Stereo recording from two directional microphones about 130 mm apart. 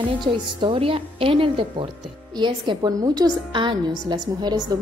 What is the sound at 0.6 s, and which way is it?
A woman's voice, 45° right (ahead or behind).